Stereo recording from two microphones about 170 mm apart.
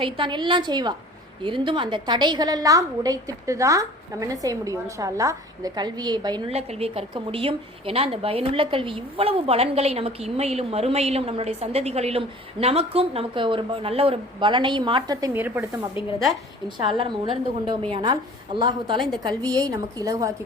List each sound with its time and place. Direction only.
0.0 s a woman's voice: 30° right (ahead or behind)
6.5 s speech: 35° right (ahead or behind); by 15.9 s 10° right (ahead or behind)
16.6 s a woman's voice: 25° right (ahead or behind)